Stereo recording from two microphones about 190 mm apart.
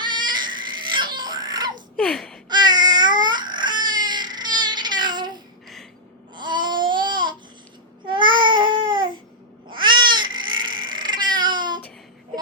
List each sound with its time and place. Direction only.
0.0 s baby cry: 25° right (ahead or behind)
2.0 s speech: 5° left (ahead or behind)
2.5 s babbling: 20° right (ahead or behind)
9.7 s cat: 25° right (ahead or behind)